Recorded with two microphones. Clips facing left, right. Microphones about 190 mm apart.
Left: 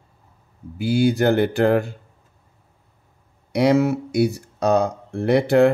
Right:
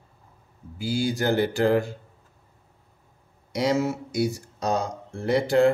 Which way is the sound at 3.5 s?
60° left (ahead or behind).